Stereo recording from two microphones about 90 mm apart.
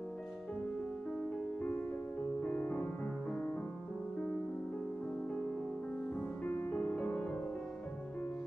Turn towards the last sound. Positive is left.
turn(degrees=15)  # may be behind; listen again after turning